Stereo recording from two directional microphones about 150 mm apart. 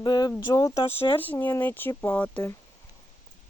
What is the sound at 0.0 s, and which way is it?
Speech, 30° left (ahead or behind).